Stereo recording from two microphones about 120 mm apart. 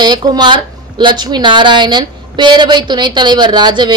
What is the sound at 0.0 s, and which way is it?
A woman's voice, 35° right (ahead or behind).